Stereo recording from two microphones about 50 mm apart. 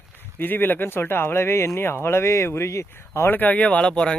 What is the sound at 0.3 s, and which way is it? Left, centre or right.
Speech, left.